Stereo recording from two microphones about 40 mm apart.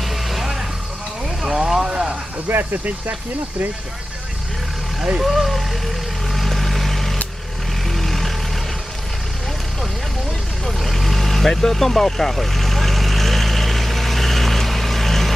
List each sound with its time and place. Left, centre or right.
0.3 s music: centre
1.4 s a sound: centre
2.4 s speech: right
5.2 s speech: centre
6.3 s vehicle: centre
10.6 s vehicle: centre